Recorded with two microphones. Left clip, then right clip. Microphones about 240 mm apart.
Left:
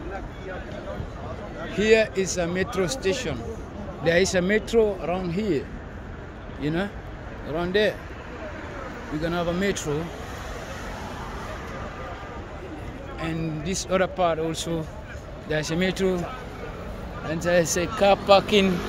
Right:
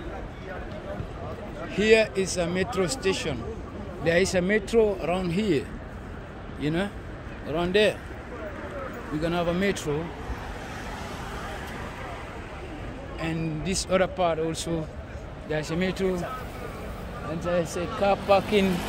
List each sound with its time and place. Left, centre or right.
1.7 s a man's voice: centre
9.2 s speech: centre
13.2 s speech: centre
17.4 s speech: left